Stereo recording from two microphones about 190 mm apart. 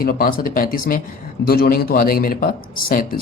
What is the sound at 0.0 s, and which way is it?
A man's voice, 50° left (ahead or behind).